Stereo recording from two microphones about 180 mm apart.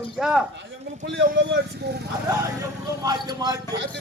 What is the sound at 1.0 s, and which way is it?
Speech, 90° right.